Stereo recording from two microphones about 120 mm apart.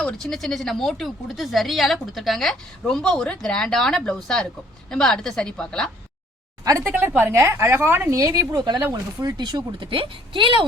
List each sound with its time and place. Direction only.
0.0 s speech: 5° left (ahead or behind)
6.7 s a woman's voice: 25° right (ahead or behind)
6.9 s a woman's voice: 15° right (ahead or behind); by 10.6 s 45° right (ahead or behind)